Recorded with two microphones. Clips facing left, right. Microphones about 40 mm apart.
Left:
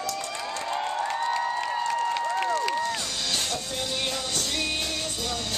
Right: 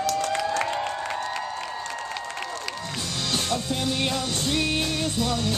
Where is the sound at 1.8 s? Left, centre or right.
Centre.